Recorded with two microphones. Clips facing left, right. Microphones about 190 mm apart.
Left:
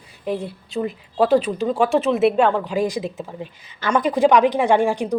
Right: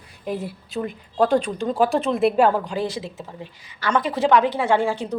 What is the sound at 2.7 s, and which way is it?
A woman's voice, 15° left (ahead or behind).